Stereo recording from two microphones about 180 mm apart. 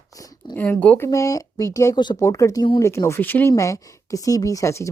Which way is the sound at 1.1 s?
20° left (ahead or behind).